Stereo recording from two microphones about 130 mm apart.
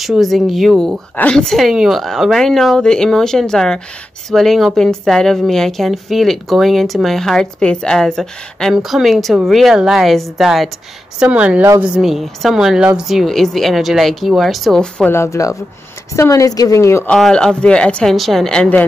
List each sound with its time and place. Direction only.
0.0 s a woman's voice: centre (ahead or behind)
15.0 s a woman's voice: 20° left (ahead or behind)
17.1 s a woman's voice: 5° left (ahead or behind)